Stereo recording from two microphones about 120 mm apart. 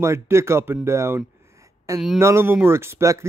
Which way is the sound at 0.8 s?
25° right (ahead or behind).